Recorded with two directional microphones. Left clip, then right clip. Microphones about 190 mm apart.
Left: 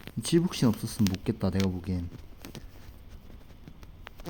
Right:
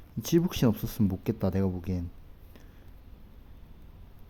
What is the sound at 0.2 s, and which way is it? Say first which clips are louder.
Speech: even; 5° right (ahead or behind).